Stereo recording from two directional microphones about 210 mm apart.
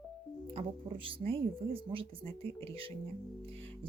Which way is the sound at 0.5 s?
25° right (ahead or behind).